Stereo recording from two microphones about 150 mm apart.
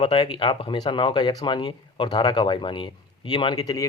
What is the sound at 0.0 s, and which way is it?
Speech, 35° left (ahead or behind).